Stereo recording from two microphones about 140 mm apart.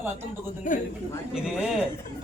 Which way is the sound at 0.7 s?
65° left (ahead or behind).